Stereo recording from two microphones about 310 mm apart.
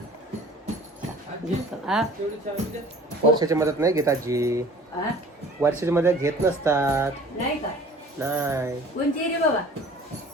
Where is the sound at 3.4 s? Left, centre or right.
Centre.